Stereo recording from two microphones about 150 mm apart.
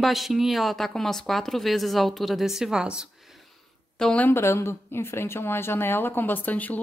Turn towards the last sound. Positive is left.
turn(degrees=10)  # may be behind; listen again after turning